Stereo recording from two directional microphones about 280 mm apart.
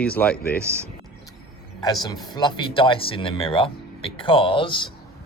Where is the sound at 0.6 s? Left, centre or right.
Centre.